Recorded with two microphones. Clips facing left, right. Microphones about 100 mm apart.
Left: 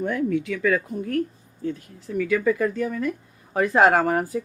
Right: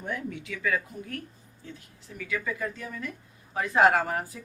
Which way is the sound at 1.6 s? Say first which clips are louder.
Left 16 dB; 50° left (ahead or behind).